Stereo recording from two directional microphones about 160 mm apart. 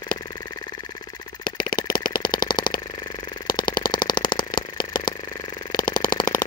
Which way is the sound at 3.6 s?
60° left (ahead or behind).